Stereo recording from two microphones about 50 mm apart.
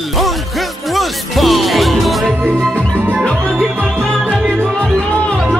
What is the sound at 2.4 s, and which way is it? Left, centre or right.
Music, right.